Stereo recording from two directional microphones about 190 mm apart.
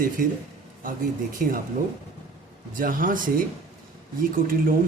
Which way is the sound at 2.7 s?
45° right (ahead or behind).